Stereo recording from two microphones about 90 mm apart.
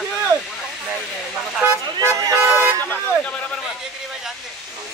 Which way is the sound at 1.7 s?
35° right (ahead or behind).